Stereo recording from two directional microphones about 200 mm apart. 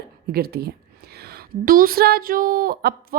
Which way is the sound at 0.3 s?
50° right (ahead or behind).